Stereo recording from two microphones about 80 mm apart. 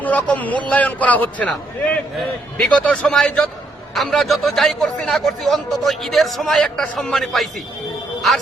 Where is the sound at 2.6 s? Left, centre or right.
Centre.